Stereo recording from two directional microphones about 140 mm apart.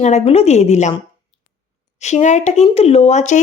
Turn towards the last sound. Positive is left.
turn(degrees=55)  # may be behind; listen again after turning